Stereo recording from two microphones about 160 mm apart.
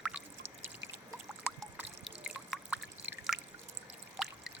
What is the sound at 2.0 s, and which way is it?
Drip, 5° right (ahead or behind).